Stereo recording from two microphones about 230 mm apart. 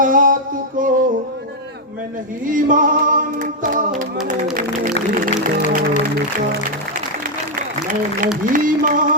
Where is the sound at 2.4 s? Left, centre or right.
Right.